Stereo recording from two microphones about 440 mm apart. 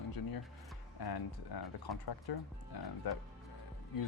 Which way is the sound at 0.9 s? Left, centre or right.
Left.